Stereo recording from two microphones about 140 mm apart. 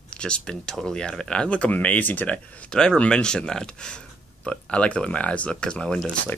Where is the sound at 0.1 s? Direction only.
5° left (ahead or behind).